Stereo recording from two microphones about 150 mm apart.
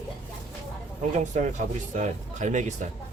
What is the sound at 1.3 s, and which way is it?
Speech, 50° right (ahead or behind).